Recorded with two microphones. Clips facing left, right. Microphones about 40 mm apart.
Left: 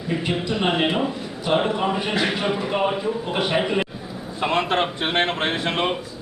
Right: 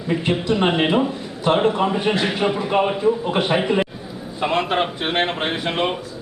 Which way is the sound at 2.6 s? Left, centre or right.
Right.